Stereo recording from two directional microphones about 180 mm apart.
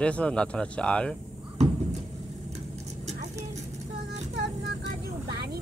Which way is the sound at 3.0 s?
40° right (ahead or behind).